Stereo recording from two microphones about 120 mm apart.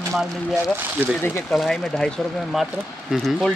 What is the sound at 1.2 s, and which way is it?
Speech, 20° left (ahead or behind).